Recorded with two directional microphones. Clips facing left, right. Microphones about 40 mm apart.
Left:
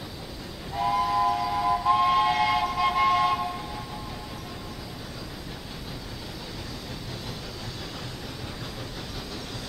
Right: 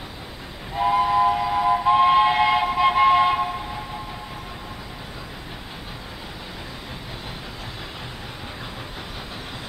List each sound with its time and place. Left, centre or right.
0.7 s train: right